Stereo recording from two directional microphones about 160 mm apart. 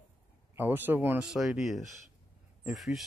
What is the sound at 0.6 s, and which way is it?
Speech, 15° right (ahead or behind).